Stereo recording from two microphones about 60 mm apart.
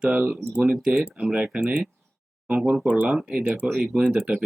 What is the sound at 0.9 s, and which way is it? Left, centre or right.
Speech, centre.